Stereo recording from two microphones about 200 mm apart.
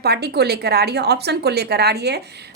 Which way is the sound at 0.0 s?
50° right (ahead or behind).